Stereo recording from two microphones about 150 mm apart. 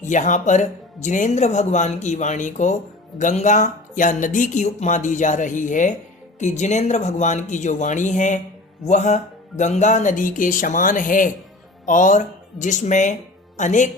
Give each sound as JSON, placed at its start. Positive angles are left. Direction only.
{"t": 0.0, "sound": "speech", "side_deg": 55}